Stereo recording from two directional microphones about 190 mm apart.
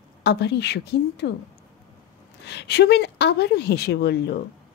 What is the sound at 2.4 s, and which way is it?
Speech, 60° left (ahead or behind).